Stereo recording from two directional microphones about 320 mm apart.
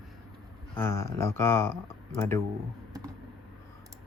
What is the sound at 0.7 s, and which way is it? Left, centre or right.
Speech, centre.